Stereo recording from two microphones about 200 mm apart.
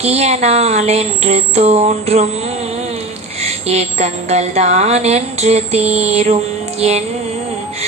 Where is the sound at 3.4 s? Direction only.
30° right (ahead or behind).